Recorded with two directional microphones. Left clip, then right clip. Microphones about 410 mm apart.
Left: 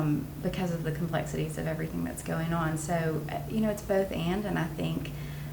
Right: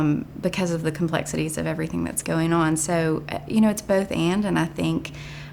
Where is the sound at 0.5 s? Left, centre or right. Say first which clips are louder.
Right 9 dB; right.